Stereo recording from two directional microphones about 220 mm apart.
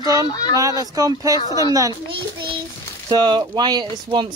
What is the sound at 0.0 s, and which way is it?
Speech, 15° right (ahead or behind).